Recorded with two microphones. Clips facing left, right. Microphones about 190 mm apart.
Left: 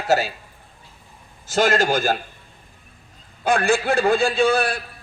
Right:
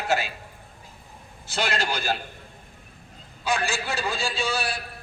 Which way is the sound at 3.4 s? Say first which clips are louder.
Left 8 dB; 55° left (ahead or behind).